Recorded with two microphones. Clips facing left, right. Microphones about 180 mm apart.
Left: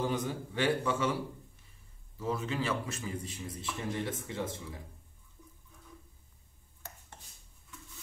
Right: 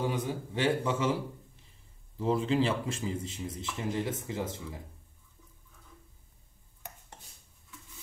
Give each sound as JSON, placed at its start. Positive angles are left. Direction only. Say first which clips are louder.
{"t": 0.1, "sound": "a man's voice", "louder": "right 1 dB", "side_deg": -15}
{"t": 2.1, "sound": "a man's voice", "louder": "right 7 dB", "side_deg": -30}